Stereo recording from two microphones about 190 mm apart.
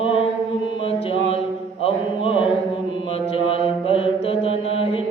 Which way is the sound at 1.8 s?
30° left (ahead or behind).